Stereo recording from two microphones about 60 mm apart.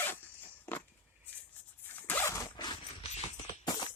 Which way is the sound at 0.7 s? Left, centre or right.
Left.